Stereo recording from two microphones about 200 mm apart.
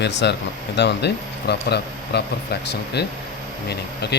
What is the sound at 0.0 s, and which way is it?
Speech, 60° left (ahead or behind).